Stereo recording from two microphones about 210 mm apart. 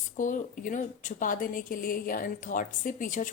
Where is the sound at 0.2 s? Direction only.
40° left (ahead or behind).